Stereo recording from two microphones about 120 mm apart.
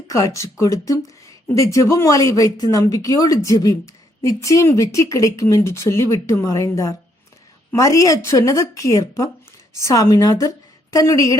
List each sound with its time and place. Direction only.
0.1 s speech: 25° left (ahead or behind)